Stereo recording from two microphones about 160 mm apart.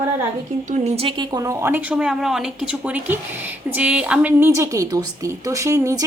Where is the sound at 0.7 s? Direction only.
45° right (ahead or behind).